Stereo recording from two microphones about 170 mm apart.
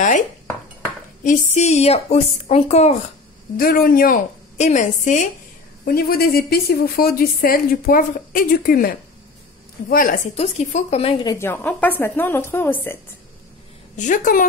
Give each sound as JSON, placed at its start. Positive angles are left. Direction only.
{"t": 1.2, "sound": "a woman's voice", "side_deg": 45}
{"t": 3.5, "sound": "a woman's voice", "side_deg": 60}
{"t": 5.9, "sound": "a woman's voice", "side_deg": 65}
{"t": 10.3, "sound": "a woman's voice", "side_deg": 40}
{"t": 11.2, "sound": "speech", "side_deg": 15}
{"t": 13.9, "sound": "a woman's voice", "side_deg": 50}